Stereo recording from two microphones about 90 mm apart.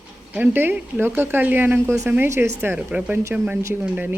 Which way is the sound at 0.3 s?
20° right (ahead or behind).